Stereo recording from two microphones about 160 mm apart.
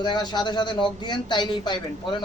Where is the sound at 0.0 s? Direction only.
25° left (ahead or behind).